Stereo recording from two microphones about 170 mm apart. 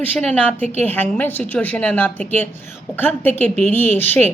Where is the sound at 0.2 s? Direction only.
10° left (ahead or behind).